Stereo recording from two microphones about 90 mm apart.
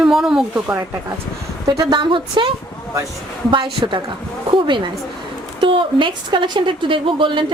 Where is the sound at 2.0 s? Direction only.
65° right (ahead or behind).